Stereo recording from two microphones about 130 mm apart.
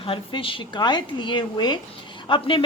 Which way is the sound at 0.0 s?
40° left (ahead or behind).